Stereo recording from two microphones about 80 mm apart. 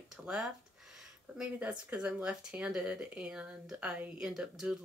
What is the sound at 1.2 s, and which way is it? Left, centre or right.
Speech, centre.